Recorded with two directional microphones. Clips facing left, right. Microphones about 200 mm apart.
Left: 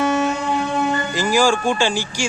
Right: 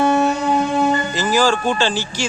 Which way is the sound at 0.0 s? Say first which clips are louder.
Right 3 dB; 35° right (ahead or behind).